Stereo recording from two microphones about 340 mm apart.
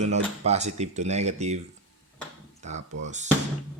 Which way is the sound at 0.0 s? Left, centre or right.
Centre.